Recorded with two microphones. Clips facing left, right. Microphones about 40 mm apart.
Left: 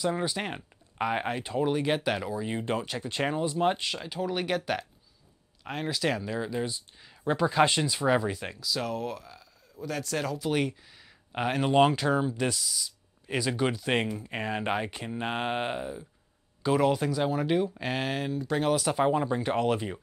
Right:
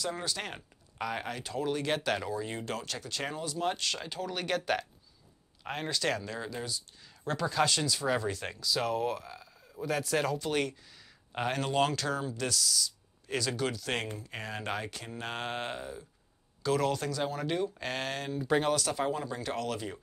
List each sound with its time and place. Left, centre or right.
0.0 s speech: centre
3.9 s speech: centre
6.6 s speech: left
8.2 s speech: centre
18.4 s speech: centre
18.7 s speech: centre